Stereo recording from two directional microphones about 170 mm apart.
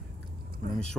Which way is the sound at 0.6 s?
55° right (ahead or behind).